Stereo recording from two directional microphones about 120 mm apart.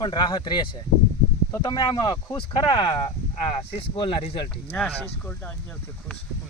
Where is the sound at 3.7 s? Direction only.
50° left (ahead or behind).